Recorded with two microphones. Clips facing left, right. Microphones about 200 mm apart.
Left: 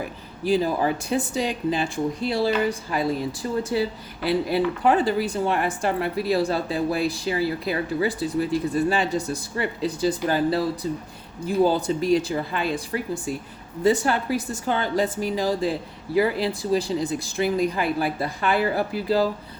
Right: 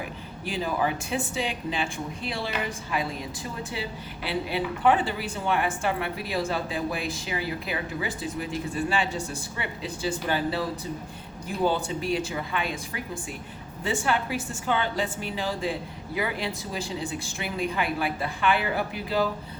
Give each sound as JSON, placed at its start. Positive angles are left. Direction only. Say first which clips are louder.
{"t": 0.4, "sound": "speech", "louder": "left 6 dB", "side_deg": 35}